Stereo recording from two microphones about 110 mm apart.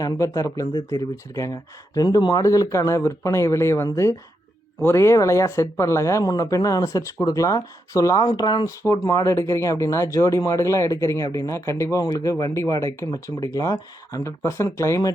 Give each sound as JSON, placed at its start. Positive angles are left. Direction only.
{"t": 0.0, "sound": "speech", "side_deg": 30}